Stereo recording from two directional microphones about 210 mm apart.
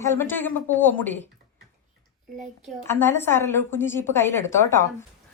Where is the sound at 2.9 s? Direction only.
10° left (ahead or behind).